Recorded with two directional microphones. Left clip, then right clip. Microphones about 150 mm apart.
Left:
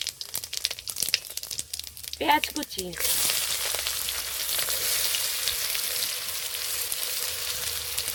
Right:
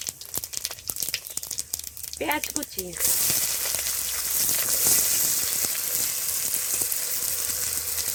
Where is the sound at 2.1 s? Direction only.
20° left (ahead or behind).